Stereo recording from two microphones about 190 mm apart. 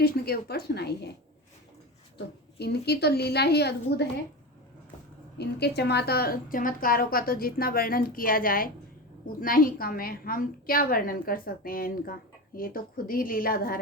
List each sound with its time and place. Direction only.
0.0 s a woman's voice: 55° left (ahead or behind)
2.1 s a woman's voice: 60° left (ahead or behind)
5.4 s a woman's voice: 60° left (ahead or behind)